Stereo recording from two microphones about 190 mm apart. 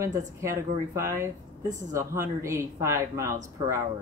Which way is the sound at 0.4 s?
15° right (ahead or behind).